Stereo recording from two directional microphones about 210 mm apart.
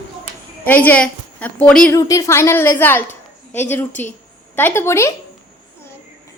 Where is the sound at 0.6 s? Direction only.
10° left (ahead or behind).